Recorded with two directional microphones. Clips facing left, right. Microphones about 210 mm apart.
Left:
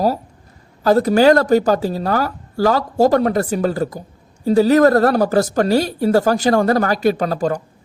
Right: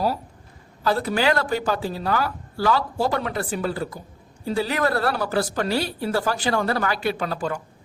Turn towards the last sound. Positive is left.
turn(degrees=40)  # may be behind; listen again after turning